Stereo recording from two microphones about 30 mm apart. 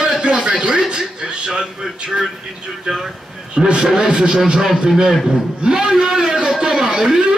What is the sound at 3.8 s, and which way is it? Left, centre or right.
Speech, right.